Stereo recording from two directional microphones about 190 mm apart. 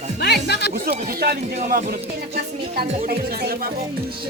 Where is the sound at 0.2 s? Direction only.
60° left (ahead or behind).